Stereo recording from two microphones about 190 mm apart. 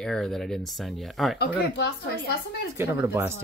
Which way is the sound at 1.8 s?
65° left (ahead or behind).